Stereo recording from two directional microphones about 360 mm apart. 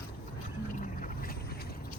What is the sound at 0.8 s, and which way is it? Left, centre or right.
Boat, left.